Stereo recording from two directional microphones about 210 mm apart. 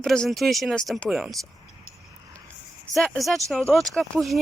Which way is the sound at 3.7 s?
Centre (ahead or behind).